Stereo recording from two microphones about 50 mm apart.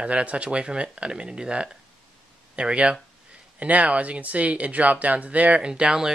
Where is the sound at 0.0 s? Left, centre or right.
Right.